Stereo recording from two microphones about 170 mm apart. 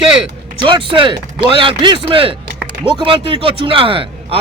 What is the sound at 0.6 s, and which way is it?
Speech, 30° right (ahead or behind).